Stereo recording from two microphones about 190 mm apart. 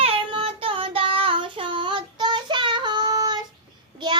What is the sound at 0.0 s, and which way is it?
Child singing, 30° right (ahead or behind).